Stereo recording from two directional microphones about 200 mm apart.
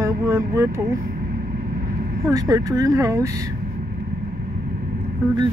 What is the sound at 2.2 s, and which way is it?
Speech, 20° right (ahead or behind).